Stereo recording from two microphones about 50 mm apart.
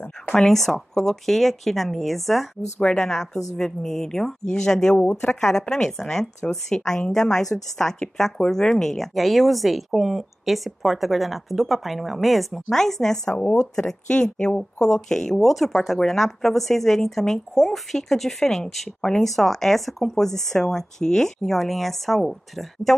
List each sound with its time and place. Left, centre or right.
0.5 s a woman's voice: centre
2.8 s a woman's voice: centre